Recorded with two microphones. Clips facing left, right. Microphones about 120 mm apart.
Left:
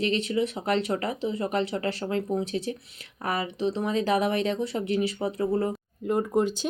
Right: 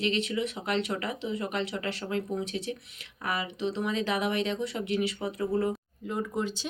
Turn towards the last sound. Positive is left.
turn(degrees=50)  # may be behind; listen again after turning